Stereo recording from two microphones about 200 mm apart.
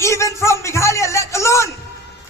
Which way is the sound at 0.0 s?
15° left (ahead or behind).